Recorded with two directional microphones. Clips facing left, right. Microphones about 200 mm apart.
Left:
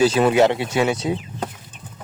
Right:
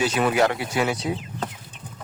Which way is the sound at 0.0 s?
30° left (ahead or behind).